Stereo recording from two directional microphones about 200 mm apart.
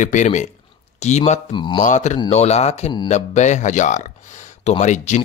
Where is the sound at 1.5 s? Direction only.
20° left (ahead or behind).